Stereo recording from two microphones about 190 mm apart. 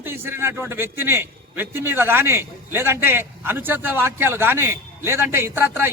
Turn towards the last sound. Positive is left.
turn(degrees=-10)  # may be behind; listen again after turning